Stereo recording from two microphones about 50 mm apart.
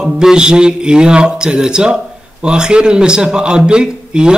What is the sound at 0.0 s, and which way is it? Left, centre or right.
Speech, centre.